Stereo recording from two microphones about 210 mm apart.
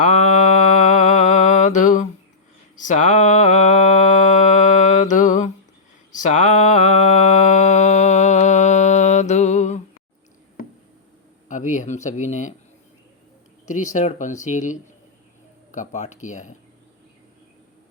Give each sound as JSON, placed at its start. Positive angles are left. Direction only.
{"t": 0.0, "sound": "mantra", "side_deg": 35}
{"t": 11.4, "sound": "speech", "side_deg": 35}
{"t": 13.7, "sound": "speech", "side_deg": 35}